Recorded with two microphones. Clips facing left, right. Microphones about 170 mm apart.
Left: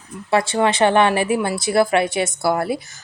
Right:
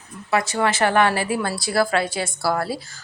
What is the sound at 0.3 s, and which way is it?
A woman's voice, 30° left (ahead or behind).